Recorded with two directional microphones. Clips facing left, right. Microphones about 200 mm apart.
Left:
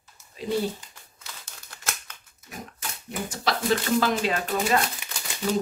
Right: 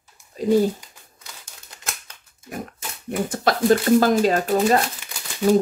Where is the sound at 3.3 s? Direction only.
50° right (ahead or behind).